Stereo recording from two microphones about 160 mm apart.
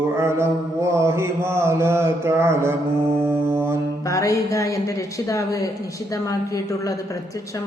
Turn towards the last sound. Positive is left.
turn(degrees=20)  # may be behind; listen again after turning